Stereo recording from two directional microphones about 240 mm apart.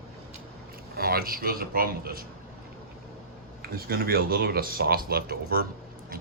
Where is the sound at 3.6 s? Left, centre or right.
Right.